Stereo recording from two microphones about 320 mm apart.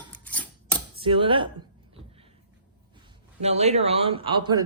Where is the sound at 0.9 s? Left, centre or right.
Centre.